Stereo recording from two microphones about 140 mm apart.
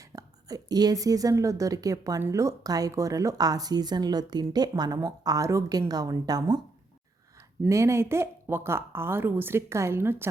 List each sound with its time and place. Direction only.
0.2 s a woman's voice: 25° right (ahead or behind)
7.7 s speech: 20° right (ahead or behind)